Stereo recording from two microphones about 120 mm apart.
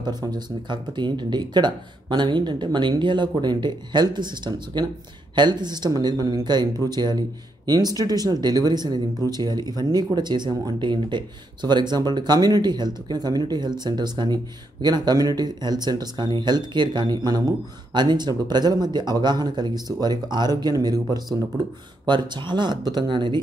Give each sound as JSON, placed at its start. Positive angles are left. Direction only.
{"t": 0.0, "sound": "speech", "side_deg": -35}